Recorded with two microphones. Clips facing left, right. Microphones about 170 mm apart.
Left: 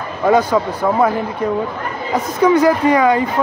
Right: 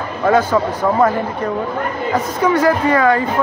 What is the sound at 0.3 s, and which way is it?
Speech, 15° left (ahead or behind).